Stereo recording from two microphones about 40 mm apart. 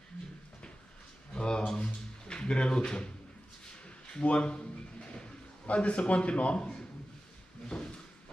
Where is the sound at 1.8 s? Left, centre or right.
Left.